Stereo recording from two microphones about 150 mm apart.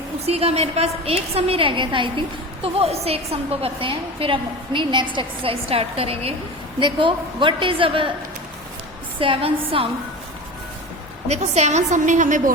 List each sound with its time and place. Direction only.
0.3 s a woman's voice: 45° right (ahead or behind)
9.1 s a woman's voice: 35° right (ahead or behind)
11.3 s a woman's voice: 45° right (ahead or behind)